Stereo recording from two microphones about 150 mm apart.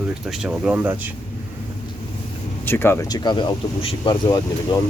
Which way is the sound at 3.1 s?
30° left (ahead or behind).